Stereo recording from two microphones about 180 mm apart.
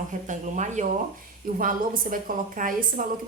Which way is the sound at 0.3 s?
40° right (ahead or behind).